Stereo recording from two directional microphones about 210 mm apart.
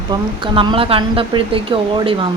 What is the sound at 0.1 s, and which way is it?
Speech, 25° right (ahead or behind).